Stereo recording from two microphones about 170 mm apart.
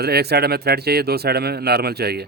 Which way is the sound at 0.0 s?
70° right (ahead or behind).